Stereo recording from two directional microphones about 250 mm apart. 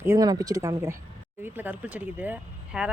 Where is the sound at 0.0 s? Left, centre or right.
Centre.